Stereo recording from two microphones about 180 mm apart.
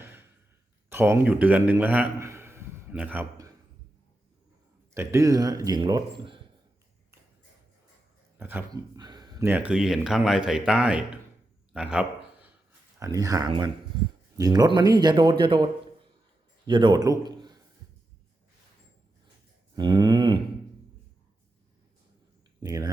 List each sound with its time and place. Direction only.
0.0 s sigh: 15° right (ahead or behind)
0.9 s a man's voice: 15° right (ahead or behind)
4.9 s speech: 15° right (ahead or behind)
8.4 s speech: 10° right (ahead or behind)
9.0 s a sound: 25° right (ahead or behind)
9.5 s speech: 5° right (ahead or behind)
11.7 s a sound: 5° right (ahead or behind)
13.0 s a man's voice: 20° right (ahead or behind)
19.7 s a sound: 25° right (ahead or behind)
22.6 s speech: 20° right (ahead or behind)